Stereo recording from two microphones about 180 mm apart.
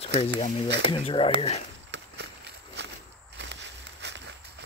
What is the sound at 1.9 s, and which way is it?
Walk, 75° right (ahead or behind).